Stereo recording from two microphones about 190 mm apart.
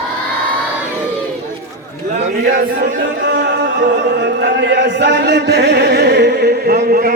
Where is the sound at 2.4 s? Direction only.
60° right (ahead or behind).